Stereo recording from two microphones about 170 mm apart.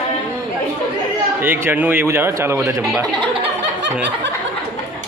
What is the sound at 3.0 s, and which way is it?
Speech, 30° right (ahead or behind).